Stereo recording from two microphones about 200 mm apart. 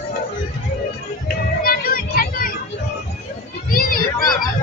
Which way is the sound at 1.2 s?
45° left (ahead or behind).